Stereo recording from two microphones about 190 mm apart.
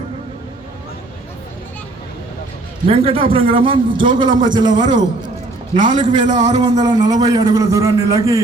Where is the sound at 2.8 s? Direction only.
30° right (ahead or behind).